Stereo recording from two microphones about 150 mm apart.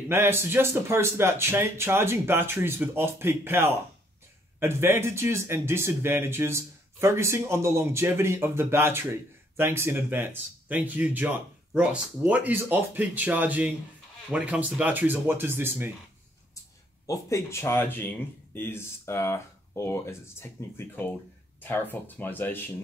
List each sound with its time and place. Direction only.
0.1 s speech: 15° right (ahead or behind)
17.0 s speech: 20° left (ahead or behind)